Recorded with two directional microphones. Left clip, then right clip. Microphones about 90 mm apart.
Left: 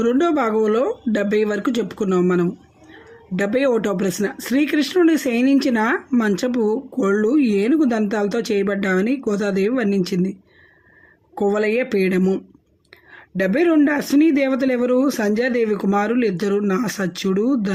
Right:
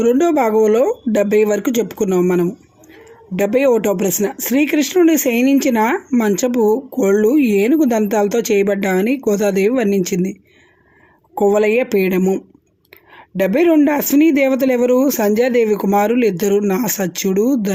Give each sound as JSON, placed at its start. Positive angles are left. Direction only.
{"t": 0.0, "sound": "speech", "side_deg": -15}
{"t": 11.3, "sound": "speech", "side_deg": -25}